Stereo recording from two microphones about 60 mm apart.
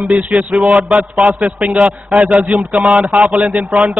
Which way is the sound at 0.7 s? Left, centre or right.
Centre.